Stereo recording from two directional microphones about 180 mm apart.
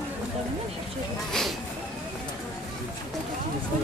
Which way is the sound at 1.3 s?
Centre (ahead or behind).